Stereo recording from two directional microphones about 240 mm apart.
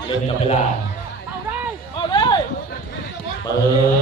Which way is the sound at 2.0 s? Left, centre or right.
Centre.